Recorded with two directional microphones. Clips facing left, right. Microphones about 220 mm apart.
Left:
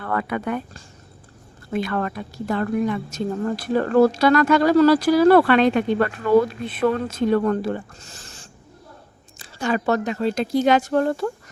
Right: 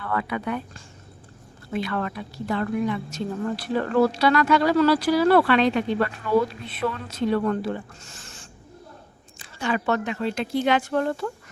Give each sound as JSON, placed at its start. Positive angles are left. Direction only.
{"t": 0.0, "sound": "a woman's voice", "side_deg": 45}